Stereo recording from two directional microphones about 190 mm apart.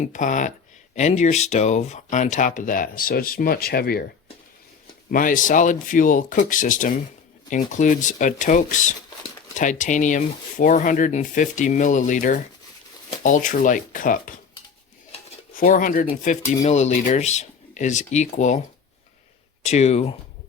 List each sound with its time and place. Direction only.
0.0 s speech: 40° left (ahead or behind)
5.1 s speech: 45° left (ahead or behind)
15.5 s speech: 45° left (ahead or behind)
19.6 s speech: 35° left (ahead or behind)